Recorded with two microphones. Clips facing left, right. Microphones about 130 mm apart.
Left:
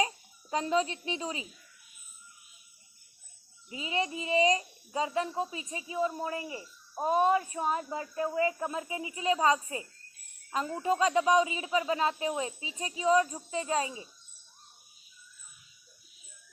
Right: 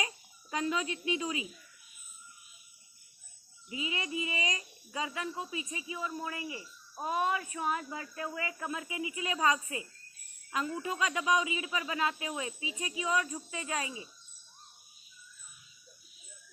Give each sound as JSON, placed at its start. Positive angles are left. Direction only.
{"t": 0.5, "sound": "speech", "side_deg": 35}
{"t": 3.7, "sound": "speech", "side_deg": 40}